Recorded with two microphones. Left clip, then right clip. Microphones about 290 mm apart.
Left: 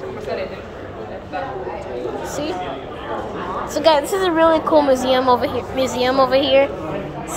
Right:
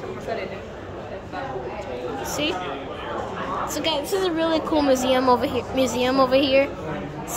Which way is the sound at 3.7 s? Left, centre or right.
Centre.